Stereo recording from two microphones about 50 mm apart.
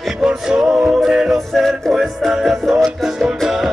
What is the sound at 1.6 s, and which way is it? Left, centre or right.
Music, centre.